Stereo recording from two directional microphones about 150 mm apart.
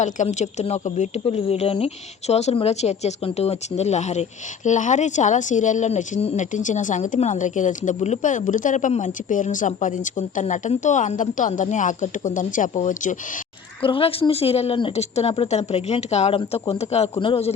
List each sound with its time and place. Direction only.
0.0 s a woman's voice: 50° left (ahead or behind)
13.8 s a man's voice: 35° left (ahead or behind)